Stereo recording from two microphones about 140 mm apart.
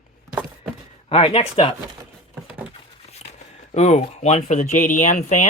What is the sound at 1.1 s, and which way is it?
Speech, 45° left (ahead or behind).